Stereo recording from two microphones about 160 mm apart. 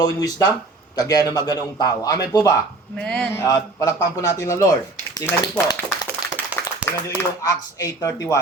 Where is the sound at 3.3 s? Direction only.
20° left (ahead or behind).